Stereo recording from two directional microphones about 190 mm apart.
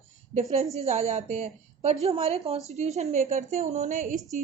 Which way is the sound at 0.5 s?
35° right (ahead or behind).